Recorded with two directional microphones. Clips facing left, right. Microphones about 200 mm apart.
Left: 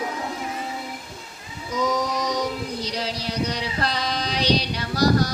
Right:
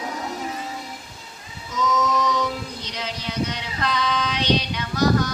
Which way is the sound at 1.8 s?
35° left (ahead or behind).